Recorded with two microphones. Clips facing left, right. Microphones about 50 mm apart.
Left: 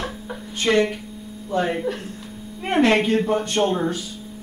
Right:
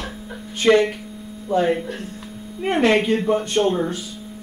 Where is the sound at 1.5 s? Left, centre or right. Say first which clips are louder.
Right 3 dB; centre.